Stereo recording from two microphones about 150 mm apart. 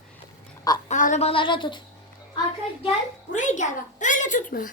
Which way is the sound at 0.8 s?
55° left (ahead or behind).